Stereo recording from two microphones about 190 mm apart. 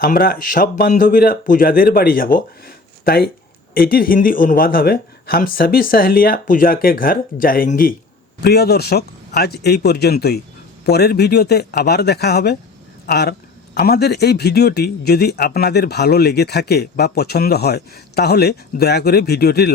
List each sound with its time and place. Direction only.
0.0 s speech: 50° left (ahead or behind)
8.4 s a man's voice: 60° left (ahead or behind)